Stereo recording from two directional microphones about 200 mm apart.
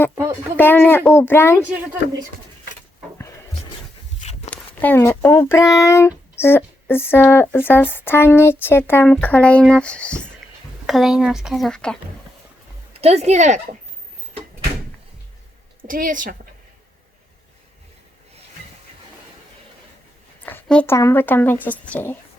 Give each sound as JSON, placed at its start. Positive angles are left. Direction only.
{"t": 0.5, "sound": "a woman's voice", "side_deg": 10}
{"t": 4.2, "sound": "walk", "side_deg": 35}
{"t": 4.5, "sound": "a woman's voice", "side_deg": 10}
{"t": 12.9, "sound": "speech", "side_deg": -30}
{"t": 15.9, "sound": "a woman's voice", "side_deg": -40}
{"t": 20.4, "sound": "a woman's voice", "side_deg": 5}